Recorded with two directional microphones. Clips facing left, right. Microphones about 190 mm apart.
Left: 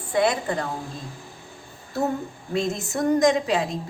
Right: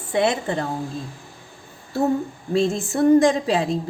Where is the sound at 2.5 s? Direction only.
30° right (ahead or behind).